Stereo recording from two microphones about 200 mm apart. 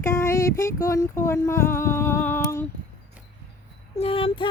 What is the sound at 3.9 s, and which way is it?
Speech, 25° left (ahead or behind).